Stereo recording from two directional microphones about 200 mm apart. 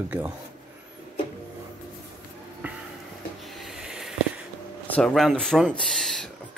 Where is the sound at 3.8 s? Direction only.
Centre (ahead or behind).